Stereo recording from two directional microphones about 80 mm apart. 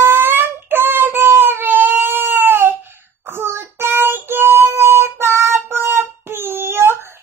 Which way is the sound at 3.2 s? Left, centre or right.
Right.